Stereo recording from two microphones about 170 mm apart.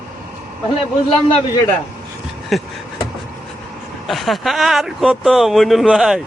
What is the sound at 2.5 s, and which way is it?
Speech, centre (ahead or behind).